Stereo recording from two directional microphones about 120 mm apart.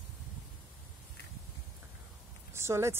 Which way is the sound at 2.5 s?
20° right (ahead or behind).